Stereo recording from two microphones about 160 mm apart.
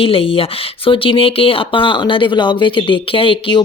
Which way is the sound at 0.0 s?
35° left (ahead or behind).